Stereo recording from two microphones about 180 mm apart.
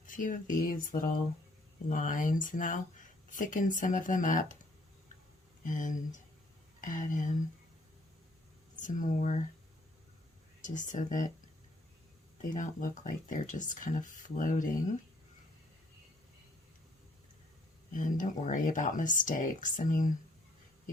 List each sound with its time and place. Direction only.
0.0 s speech: 45° left (ahead or behind)
5.6 s speech: 45° left (ahead or behind)
8.8 s speech: 45° left (ahead or behind)
10.6 s speech: 45° left (ahead or behind)
12.5 s speech: 45° left (ahead or behind)
17.9 s speech: 45° left (ahead or behind)